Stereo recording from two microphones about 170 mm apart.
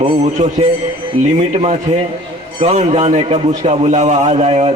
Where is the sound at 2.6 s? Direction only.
40° right (ahead or behind).